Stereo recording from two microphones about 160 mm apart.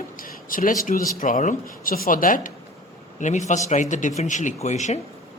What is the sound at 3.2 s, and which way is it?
Speech, 50° left (ahead or behind).